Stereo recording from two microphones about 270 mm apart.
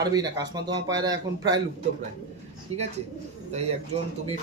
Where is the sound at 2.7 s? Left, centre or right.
Right.